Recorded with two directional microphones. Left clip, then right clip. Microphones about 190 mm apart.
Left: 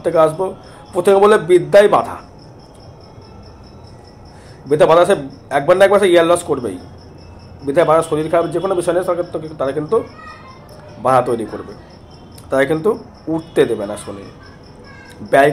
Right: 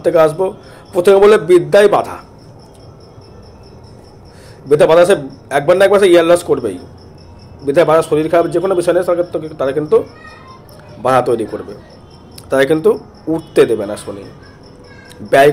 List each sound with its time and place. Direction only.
0.0 s a man's voice: 15° right (ahead or behind)
4.6 s a man's voice: 15° right (ahead or behind)
15.2 s a man's voice: 15° right (ahead or behind)